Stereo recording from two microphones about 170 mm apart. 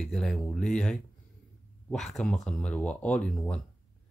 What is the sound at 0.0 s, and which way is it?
Speech, centre (ahead or behind).